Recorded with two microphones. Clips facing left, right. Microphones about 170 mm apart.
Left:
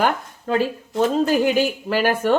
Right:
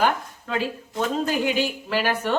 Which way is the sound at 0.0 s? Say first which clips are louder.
Left 2 dB; 45° left (ahead or behind).